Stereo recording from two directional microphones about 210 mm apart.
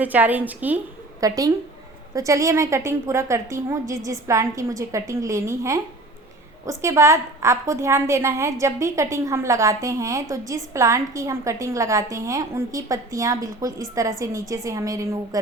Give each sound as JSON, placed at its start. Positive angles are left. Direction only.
{"t": 0.0, "sound": "a woman's voice", "side_deg": -10}